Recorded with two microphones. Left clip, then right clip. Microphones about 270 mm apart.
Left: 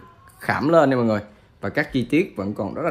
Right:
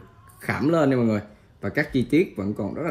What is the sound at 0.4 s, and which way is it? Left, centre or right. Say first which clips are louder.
Speech: left 5 dB; left.